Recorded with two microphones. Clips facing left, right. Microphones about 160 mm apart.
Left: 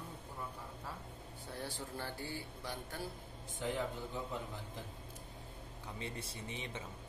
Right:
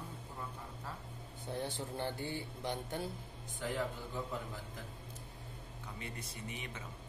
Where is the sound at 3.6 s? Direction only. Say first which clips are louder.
Left 1 dB; 20° left (ahead or behind).